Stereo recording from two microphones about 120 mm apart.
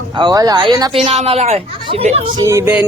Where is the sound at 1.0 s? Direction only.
60° right (ahead or behind).